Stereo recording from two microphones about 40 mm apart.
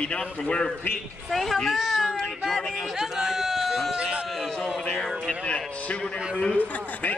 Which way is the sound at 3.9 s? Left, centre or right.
Right.